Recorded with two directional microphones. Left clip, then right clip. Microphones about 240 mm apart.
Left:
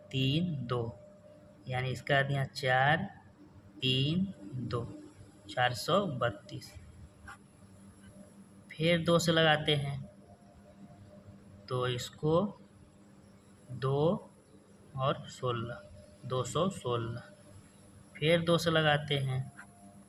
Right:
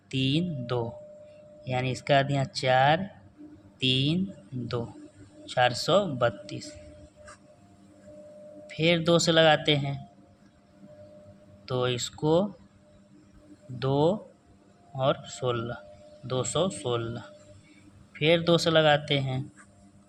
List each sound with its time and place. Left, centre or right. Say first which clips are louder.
0.1 s speech: right 5 dB; right
5.5 s speech: right 6 dB; right
8.6 s speech: right 5 dB; right
11.7 s speech: right 6 dB; right
13.8 s speech: right 5 dB; right
18.2 s speech: right 5 dB; right